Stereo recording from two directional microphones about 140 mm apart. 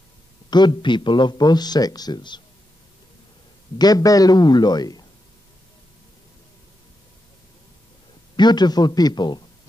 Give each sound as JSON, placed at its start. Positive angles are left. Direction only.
{"t": 0.5, "sound": "speech", "side_deg": 30}
{"t": 3.7, "sound": "a man's voice", "side_deg": 30}
{"t": 8.4, "sound": "speech", "side_deg": 30}